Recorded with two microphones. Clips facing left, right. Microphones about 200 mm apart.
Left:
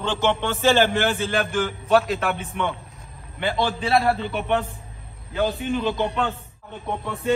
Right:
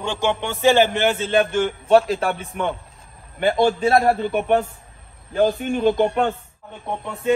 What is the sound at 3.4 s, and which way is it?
A man's voice, 50° right (ahead or behind).